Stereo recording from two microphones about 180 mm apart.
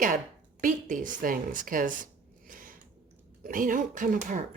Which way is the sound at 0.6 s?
45° right (ahead or behind).